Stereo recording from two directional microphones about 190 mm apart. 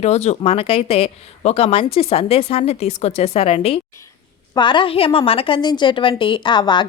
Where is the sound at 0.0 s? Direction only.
35° left (ahead or behind).